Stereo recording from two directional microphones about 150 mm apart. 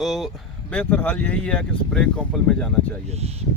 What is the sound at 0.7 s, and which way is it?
Speech, 10° left (ahead or behind).